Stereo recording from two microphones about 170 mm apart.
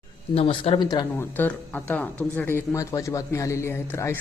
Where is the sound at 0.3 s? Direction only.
35° left (ahead or behind).